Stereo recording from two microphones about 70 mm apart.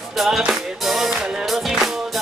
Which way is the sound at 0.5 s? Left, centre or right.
Centre.